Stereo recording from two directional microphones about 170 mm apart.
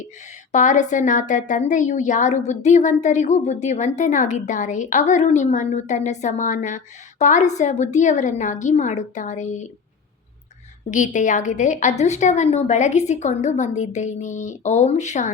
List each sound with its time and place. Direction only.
0.5 s a woman's voice: 45° left (ahead or behind)
10.9 s a woman's voice: 45° left (ahead or behind)